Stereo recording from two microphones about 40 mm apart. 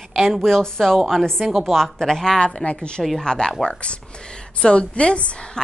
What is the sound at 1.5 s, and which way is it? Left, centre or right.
Speech, centre.